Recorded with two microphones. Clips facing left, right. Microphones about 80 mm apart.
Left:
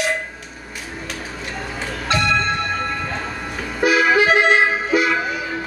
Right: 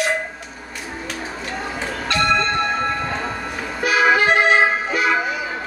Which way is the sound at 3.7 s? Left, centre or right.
Centre.